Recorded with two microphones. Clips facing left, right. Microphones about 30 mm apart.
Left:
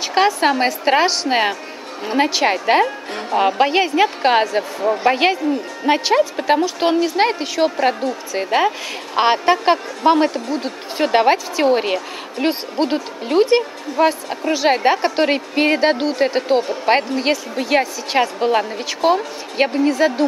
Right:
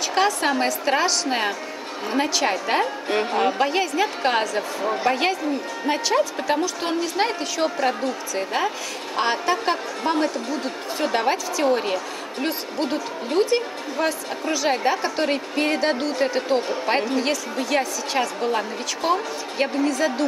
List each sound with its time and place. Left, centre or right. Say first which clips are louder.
0.1 s a woman's voice: left 6 dB; left
3.1 s speech: right 3 dB; centre
3.3 s a woman's voice: left 8 dB; left